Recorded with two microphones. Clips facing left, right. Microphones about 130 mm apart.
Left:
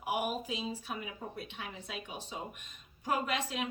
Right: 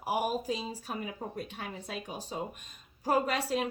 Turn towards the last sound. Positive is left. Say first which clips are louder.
# right 5 dB
turn(degrees=-40)  # may be behind; listen again after turning